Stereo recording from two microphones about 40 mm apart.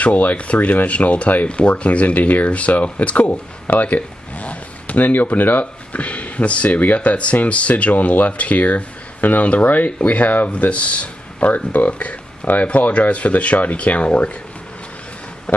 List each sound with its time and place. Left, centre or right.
0.0 s speech: left
3.3 s speech: left
5.9 s speech: left
7.0 s speech: left
11.5 s speech: left
11.9 s speech: left